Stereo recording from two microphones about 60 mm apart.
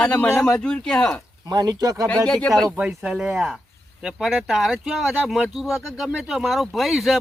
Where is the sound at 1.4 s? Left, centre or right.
Right.